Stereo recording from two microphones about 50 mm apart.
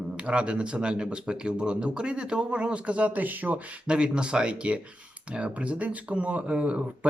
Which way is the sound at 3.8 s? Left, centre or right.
Centre.